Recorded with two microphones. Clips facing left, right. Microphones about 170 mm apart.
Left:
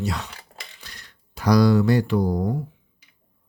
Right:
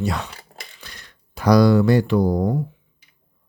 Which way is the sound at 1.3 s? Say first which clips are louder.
Right 3 dB; 60° right (ahead or behind).